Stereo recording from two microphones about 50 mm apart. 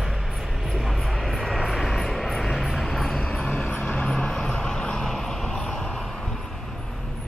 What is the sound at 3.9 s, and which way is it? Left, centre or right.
Vehicle, centre.